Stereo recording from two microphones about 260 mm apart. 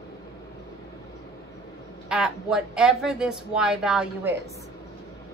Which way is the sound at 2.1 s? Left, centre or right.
Centre.